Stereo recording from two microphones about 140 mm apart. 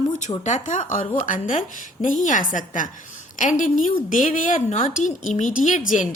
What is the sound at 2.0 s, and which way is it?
A woman's voice, 65° left (ahead or behind).